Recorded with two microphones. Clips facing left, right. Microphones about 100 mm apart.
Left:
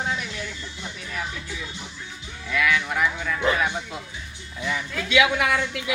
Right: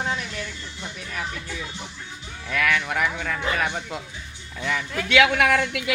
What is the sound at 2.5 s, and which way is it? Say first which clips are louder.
A woman's voice: even; 55° right (ahead or behind).